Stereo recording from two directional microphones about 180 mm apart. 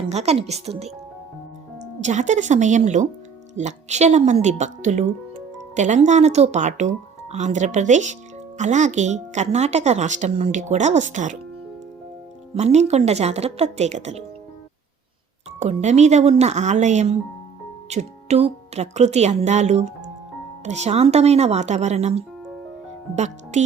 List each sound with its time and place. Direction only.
0.1 s speech: 35° right (ahead or behind)
12.5 s speech: 35° right (ahead or behind)
15.5 s speech: 40° right (ahead or behind)